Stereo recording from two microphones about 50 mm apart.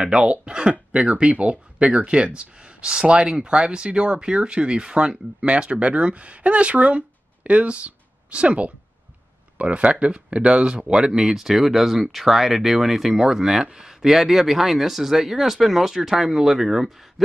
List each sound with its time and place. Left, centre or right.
0.0 s speech: centre